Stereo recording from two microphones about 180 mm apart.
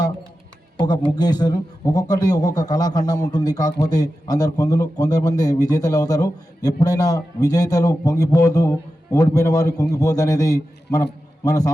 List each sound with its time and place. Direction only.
1.1 s a man's voice: 20° left (ahead or behind)